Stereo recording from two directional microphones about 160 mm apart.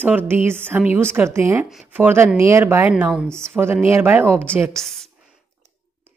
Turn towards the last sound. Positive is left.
turn(degrees=0)  # may be behind; listen again after turning